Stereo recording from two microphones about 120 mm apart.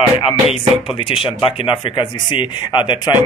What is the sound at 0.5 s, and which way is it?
Speech, 50° left (ahead or behind).